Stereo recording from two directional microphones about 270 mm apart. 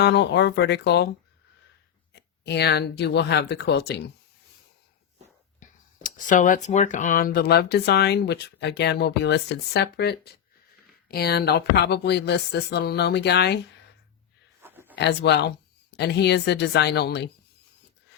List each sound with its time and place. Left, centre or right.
0.0 s speech: left
2.1 s speech: left
5.5 s speech: left
14.6 s a sound: centre
14.9 s speech: left